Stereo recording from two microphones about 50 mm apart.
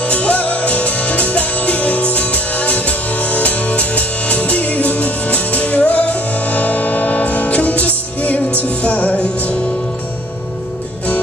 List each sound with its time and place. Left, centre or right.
0.0 s music: left